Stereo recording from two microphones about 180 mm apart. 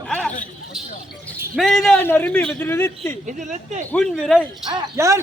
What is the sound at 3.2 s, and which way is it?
Speech, 45° right (ahead or behind).